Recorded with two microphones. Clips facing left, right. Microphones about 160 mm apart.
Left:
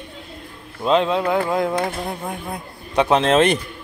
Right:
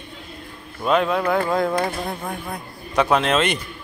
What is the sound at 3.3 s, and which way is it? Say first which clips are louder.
Speech: left 5 dB; 35° left (ahead or behind).